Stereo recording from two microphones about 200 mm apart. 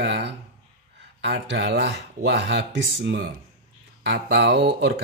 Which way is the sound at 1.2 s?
60° right (ahead or behind).